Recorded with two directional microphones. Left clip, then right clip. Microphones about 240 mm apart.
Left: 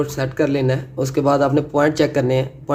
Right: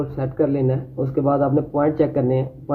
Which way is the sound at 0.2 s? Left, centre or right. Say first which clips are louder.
Right 1 dB; left.